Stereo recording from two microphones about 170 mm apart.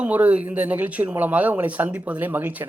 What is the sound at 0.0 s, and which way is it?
Speech, 10° right (ahead or behind).